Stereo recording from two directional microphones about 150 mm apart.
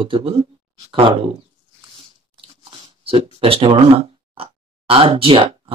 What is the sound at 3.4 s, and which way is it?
Speech, 40° right (ahead or behind).